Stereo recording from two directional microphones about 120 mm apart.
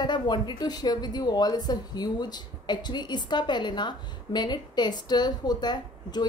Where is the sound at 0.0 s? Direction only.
40° left (ahead or behind).